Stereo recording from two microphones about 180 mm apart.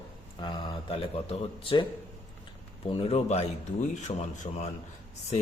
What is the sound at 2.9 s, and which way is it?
A man's voice, 35° left (ahead or behind).